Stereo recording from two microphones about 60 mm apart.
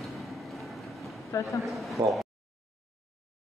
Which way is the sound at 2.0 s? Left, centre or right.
Right.